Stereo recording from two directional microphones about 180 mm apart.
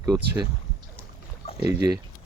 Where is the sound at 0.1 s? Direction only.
10° right (ahead or behind).